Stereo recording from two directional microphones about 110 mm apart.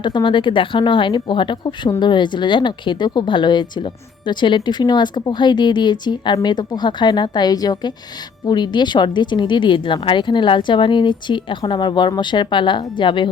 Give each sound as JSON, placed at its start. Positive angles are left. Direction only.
{"t": 0.0, "sound": "speech", "side_deg": 45}